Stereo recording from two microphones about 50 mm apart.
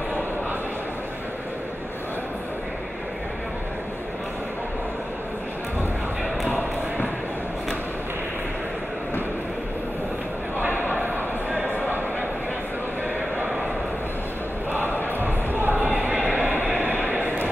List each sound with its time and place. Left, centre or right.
10.8 s a sound: right
15.1 s basketball bounce: right
16.3 s vehicle: right